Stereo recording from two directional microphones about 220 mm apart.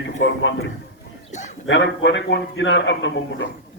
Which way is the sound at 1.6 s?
55° left (ahead or behind).